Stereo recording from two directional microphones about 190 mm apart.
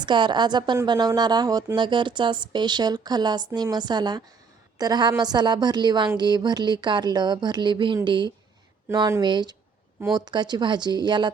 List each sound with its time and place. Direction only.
0.0 s a woman's voice: 25° right (ahead or behind)